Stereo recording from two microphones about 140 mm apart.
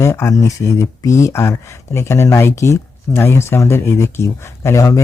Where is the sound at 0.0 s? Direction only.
20° left (ahead or behind).